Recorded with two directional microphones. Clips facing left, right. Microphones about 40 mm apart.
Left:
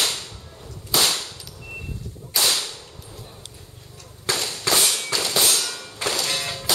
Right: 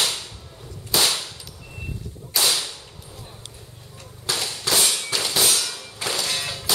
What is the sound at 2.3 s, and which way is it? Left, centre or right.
Whip, centre.